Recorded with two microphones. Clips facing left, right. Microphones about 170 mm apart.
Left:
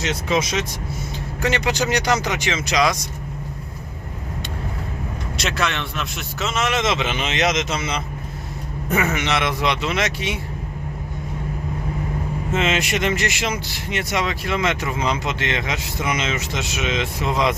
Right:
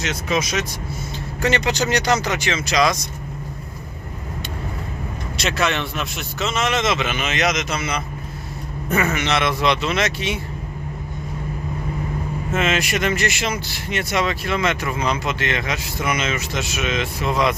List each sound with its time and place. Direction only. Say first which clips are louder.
0.0 s speech: left 1 dB; 30° left (ahead or behind)
1.4 s speech: right 1 dB; 10° left (ahead or behind)
5.4 s speech: right 3 dB; centre (ahead or behind)
6.8 s speech: even; 25° left (ahead or behind)
9.1 s speech: right 1 dB; 15° left (ahead or behind)
12.5 s speech: even; 20° left (ahead or behind)